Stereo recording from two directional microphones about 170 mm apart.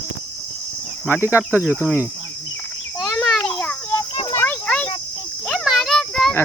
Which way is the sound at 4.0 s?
25° left (ahead or behind).